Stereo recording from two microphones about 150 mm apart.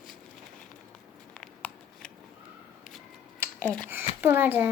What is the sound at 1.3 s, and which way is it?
Scissors, 5° left (ahead or behind).